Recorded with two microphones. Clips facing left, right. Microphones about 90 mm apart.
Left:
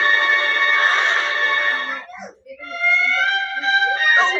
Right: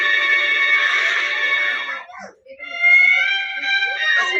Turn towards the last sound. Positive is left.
turn(degrees=25)  # may be behind; listen again after turning